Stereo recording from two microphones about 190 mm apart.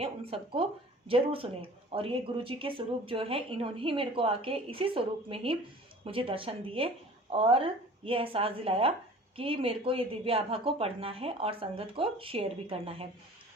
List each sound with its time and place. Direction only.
0.0 s speech: 30° right (ahead or behind)